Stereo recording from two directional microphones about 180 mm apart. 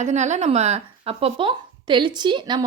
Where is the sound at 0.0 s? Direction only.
40° right (ahead or behind).